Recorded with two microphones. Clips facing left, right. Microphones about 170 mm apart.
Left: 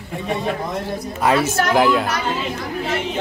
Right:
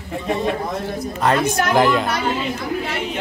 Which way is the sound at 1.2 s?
5° left (ahead or behind).